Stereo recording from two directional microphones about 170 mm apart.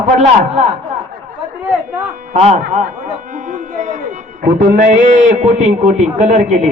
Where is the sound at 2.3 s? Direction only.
40° right (ahead or behind).